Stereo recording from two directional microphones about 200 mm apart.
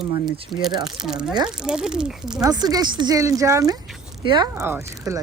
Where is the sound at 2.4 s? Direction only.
20° right (ahead or behind).